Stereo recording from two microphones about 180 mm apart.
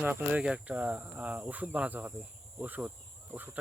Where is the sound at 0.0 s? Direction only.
10° right (ahead or behind).